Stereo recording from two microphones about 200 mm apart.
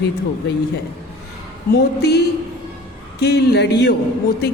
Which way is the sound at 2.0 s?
55° left (ahead or behind).